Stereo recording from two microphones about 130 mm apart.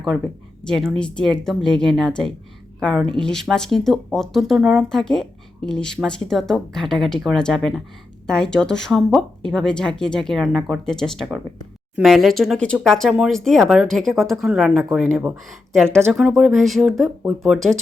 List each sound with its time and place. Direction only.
0.6 s speech: 5° left (ahead or behind)
15.4 s speech: centre (ahead or behind)
15.9 s speech: 20° right (ahead or behind)
16.1 s speech: 5° right (ahead or behind)